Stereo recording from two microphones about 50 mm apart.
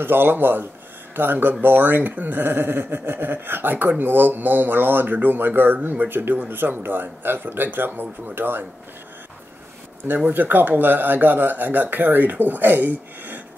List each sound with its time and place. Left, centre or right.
0.0 s speech: right
10.0 s speech: right